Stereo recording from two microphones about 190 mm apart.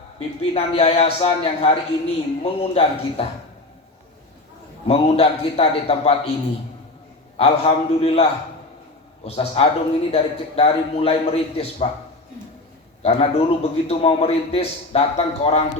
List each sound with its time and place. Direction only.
0.2 s a man's voice: 30° left (ahead or behind)
4.9 s a man's voice: 30° left (ahead or behind)
7.3 s a man's voice: 30° left (ahead or behind)
13.0 s a man's voice: 35° left (ahead or behind)